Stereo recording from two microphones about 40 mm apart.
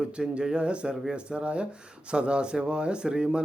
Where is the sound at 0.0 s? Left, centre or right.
Right.